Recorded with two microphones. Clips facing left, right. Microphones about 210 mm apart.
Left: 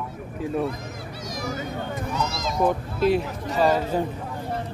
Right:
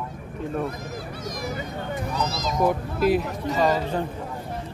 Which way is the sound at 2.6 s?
Centre (ahead or behind).